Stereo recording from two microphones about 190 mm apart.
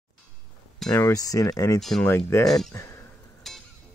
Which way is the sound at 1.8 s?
Centre (ahead or behind).